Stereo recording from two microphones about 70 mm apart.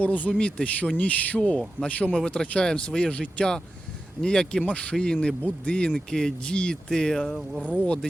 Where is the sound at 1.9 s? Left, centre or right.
Left.